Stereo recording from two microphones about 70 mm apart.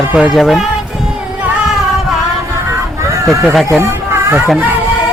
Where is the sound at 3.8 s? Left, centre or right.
Right.